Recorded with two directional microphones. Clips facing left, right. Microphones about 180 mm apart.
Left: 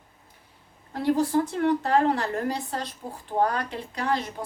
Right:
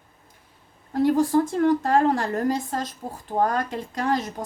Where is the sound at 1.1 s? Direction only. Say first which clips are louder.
Right 3 dB; 45° right (ahead or behind).